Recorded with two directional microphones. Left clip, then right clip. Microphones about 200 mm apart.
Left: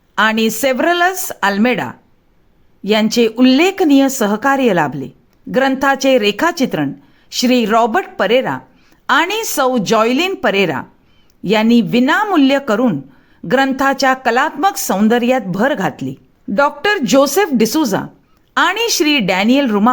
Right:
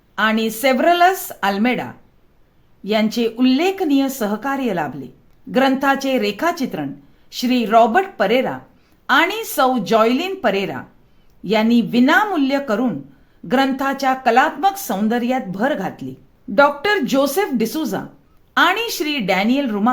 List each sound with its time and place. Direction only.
0.2 s speech: 30° left (ahead or behind)